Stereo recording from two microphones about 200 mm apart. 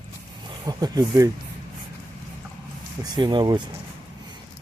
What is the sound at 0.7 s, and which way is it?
Speech, 20° right (ahead or behind).